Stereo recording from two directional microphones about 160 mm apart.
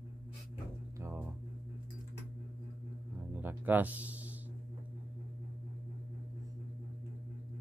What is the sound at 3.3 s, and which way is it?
Music, 10° right (ahead or behind).